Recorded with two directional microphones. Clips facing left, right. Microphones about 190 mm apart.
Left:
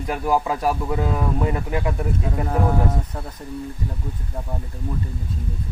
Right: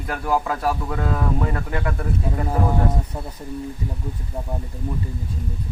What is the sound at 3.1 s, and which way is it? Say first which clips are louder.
Speech: right 1 dB; 10° right (ahead or behind).